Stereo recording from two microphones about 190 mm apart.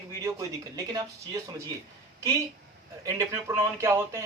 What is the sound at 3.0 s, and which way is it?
A man's voice, 15° right (ahead or behind).